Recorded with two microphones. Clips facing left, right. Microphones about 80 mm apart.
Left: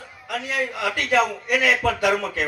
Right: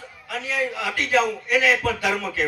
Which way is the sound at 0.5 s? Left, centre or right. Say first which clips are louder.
Even; left.